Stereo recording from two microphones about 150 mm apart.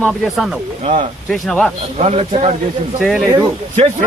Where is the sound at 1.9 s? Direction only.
45° right (ahead or behind).